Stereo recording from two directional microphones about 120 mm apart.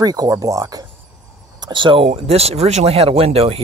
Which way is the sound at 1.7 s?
45° right (ahead or behind).